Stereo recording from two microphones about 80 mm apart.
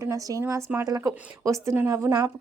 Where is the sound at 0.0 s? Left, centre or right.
Right.